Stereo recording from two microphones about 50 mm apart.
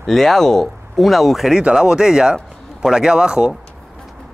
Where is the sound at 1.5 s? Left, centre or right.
Centre.